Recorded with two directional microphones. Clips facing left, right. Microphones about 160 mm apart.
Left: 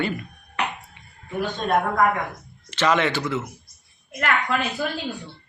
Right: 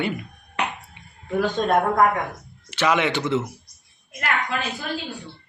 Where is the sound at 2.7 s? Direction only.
10° right (ahead or behind).